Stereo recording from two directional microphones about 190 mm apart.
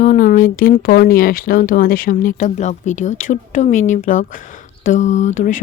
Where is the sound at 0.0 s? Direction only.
45° left (ahead or behind).